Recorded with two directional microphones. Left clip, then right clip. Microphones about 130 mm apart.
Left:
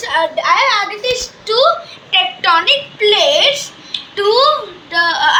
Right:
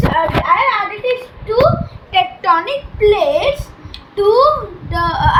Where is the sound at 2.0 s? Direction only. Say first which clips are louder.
Left 1 dB; 30° right (ahead or behind).